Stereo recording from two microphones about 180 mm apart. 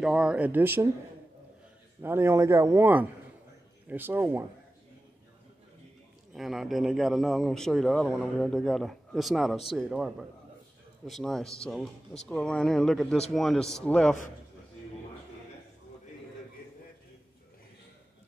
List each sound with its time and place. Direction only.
0.0 s a man's voice: 5° right (ahead or behind)
2.0 s a man's voice: 10° right (ahead or behind)
6.3 s speech: centre (ahead or behind)